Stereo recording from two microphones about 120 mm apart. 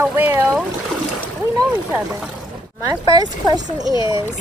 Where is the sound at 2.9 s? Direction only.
30° right (ahead or behind).